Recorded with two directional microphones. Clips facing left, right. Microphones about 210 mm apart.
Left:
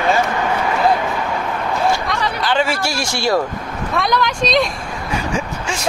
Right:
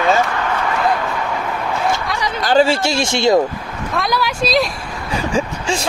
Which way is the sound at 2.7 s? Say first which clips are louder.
Right 4 dB; 25° right (ahead or behind).